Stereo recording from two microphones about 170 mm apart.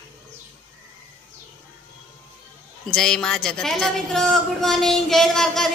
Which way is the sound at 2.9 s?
5° left (ahead or behind).